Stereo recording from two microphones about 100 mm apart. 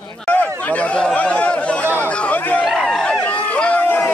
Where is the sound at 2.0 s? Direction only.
15° left (ahead or behind).